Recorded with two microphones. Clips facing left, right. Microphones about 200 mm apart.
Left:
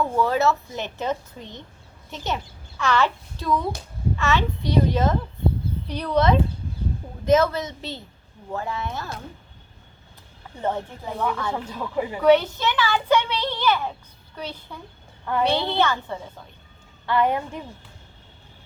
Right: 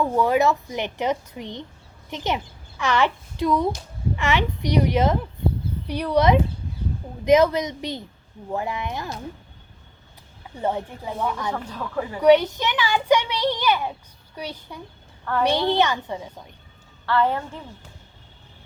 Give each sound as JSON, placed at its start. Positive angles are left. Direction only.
{"t": 0.0, "sound": "a child's voice", "side_deg": -15}
{"t": 10.6, "sound": "a child's voice", "side_deg": -10}
{"t": 11.5, "sound": "speech", "side_deg": 15}
{"t": 12.2, "sound": "a child's voice", "side_deg": -15}
{"t": 15.2, "sound": "a woman's voice", "side_deg": 15}
{"t": 15.4, "sound": "a child's voice", "side_deg": -15}
{"t": 17.1, "sound": "speech", "side_deg": 15}